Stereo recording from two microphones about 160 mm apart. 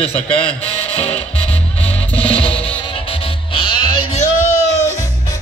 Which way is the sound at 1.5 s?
40° left (ahead or behind).